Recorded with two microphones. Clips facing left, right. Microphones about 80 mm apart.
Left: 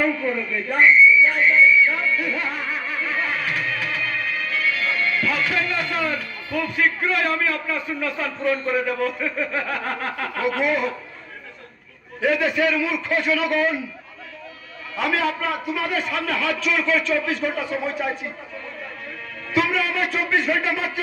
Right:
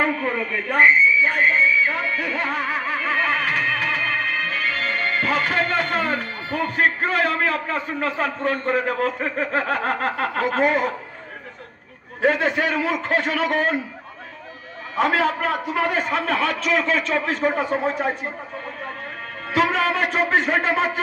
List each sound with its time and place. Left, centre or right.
0.0 s speech: right
12.2 s a man's voice: right
15.0 s a man's voice: right
19.5 s a man's voice: right